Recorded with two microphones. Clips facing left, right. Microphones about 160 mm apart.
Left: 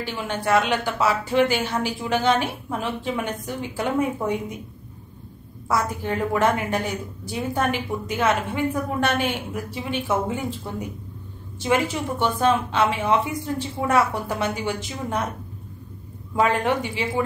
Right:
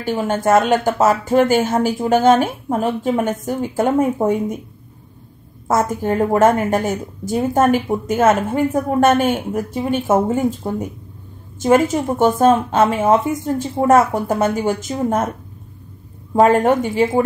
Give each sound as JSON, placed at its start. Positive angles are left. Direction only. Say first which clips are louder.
{"t": 0.0, "sound": "a woman's voice", "louder": "right 8 dB", "side_deg": -45}
{"t": 5.7, "sound": "a woman's voice", "louder": "right 7 dB", "side_deg": -45}
{"t": 16.3, "sound": "a woman's voice", "louder": "right 8 dB", "side_deg": -45}